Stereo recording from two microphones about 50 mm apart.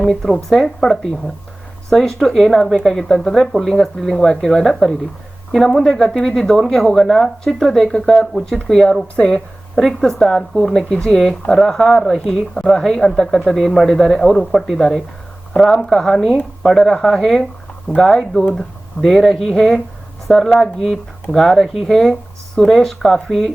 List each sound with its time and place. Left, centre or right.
0.0 s speech: centre